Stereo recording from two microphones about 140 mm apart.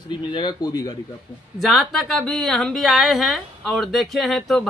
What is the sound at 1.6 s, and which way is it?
A man's voice, centre (ahead or behind).